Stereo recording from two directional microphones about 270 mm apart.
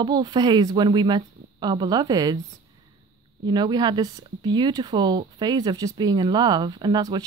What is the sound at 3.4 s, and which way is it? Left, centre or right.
Speech, centre.